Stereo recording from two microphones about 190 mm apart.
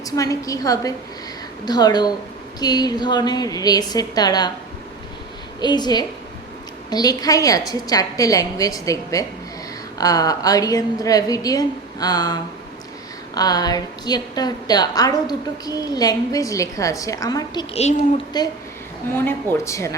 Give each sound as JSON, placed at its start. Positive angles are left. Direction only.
{"t": 0.0, "sound": "a woman's voice", "side_deg": 20}
{"t": 5.5, "sound": "a woman's voice", "side_deg": 20}
{"t": 19.6, "sound": "a woman's voice", "side_deg": 15}